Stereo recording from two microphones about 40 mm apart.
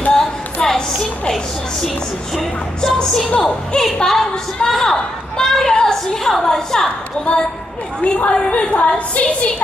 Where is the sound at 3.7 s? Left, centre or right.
Left.